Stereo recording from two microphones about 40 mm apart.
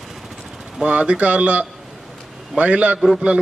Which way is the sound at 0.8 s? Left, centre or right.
Right.